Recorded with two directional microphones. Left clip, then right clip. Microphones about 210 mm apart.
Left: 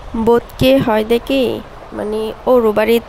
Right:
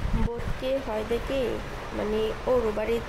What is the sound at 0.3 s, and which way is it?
Speech, 40° left (ahead or behind).